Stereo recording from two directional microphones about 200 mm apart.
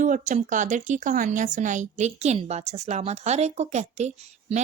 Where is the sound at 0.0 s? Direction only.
40° right (ahead or behind).